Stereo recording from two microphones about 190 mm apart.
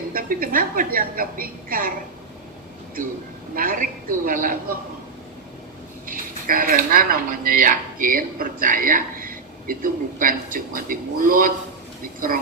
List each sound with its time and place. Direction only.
0.1 s speech: 50° right (ahead or behind)
3.5 s speech: 50° right (ahead or behind)
6.1 s speech: 45° right (ahead or behind)